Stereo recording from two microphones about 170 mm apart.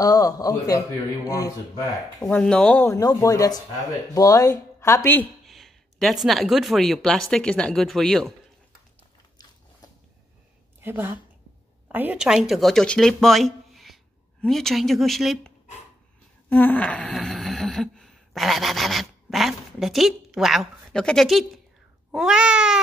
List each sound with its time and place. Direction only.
0.0 s a man's voice: 20° left (ahead or behind)
2.2 s speech: 10° left (ahead or behind)
2.9 s a man's voice: 20° left (ahead or behind)
5.5 s speech: centre (ahead or behind)
10.8 s a woman's voice: 10° right (ahead or behind)
16.4 s a sound: 10° left (ahead or behind)
22.1 s speech: 5° right (ahead or behind)